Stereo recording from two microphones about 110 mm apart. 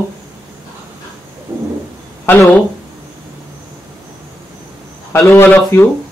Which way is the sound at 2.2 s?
20° left (ahead or behind).